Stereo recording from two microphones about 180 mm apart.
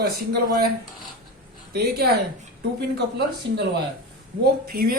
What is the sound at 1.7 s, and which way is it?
Speech, 60° right (ahead or behind).